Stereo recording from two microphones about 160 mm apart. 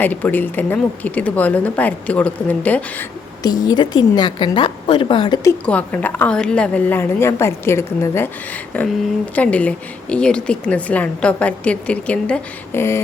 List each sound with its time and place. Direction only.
0.0 s a woman's voice: 10° left (ahead or behind)
3.4 s a woman's voice: 25° left (ahead or behind)
5.6 s a woman's voice: 10° left (ahead or behind)